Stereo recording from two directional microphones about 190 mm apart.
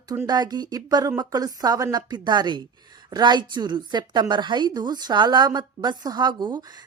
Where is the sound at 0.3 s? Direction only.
20° right (ahead or behind).